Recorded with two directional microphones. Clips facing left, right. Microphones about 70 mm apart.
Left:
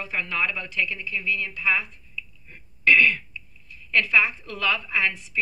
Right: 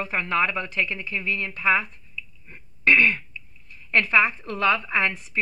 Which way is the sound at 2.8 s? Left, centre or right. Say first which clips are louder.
Even; right.